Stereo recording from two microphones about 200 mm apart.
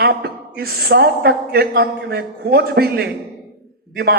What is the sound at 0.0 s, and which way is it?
A woman's voice, 50° right (ahead or behind).